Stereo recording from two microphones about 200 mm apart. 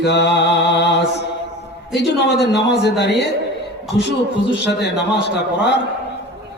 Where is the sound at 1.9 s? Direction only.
60° left (ahead or behind).